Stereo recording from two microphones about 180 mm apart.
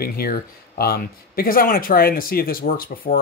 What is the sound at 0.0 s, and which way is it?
Speech, 60° left (ahead or behind).